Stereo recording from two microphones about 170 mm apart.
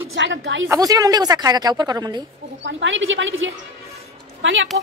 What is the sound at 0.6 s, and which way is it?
A woman's voice, 20° right (ahead or behind).